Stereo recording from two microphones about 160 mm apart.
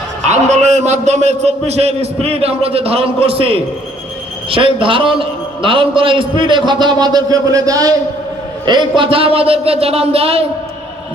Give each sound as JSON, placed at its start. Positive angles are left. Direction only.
{"t": 0.3, "sound": "a man's voice", "side_deg": -45}